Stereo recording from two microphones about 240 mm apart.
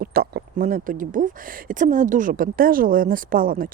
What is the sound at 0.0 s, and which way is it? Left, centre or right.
Speech, right.